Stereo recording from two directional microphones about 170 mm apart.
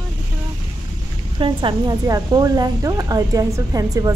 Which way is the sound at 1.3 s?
30° right (ahead or behind).